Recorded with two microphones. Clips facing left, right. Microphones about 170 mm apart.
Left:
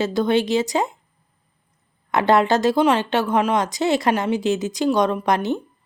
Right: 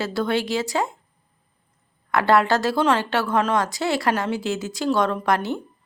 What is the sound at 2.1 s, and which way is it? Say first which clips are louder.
A woman's voice: left 2 dB; 20° left (ahead or behind).